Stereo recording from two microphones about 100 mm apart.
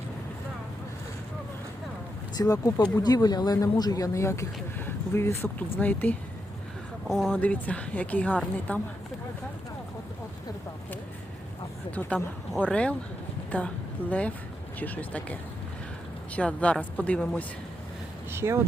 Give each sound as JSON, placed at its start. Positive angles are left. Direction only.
{"t": 2.3, "sound": "speech", "side_deg": 40}
{"t": 7.1, "sound": "speech", "side_deg": 0}
{"t": 7.3, "sound": "a woman's voice", "side_deg": 15}
{"t": 11.9, "sound": "a woman's voice", "side_deg": 15}
{"t": 18.3, "sound": "speech", "side_deg": -25}